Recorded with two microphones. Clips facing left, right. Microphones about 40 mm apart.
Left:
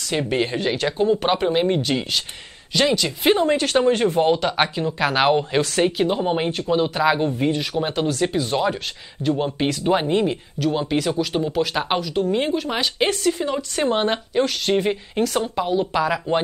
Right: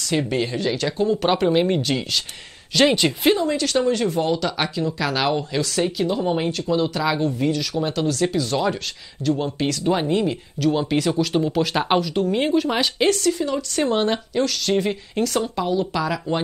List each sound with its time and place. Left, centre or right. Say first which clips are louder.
0.1 s speech: even; centre
0.4 s speech: left 1 dB; left; by 2.0 s centre
2.8 s a woman's voice: right 2 dB; centre
3.3 s speech: left 2 dB; left
10.6 s speech: right 1 dB; centre
13.0 s speech: right 1 dB; centre